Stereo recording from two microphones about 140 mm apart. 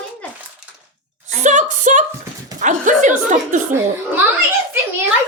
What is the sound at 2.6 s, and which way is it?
A woman's voice, 65° right (ahead or behind).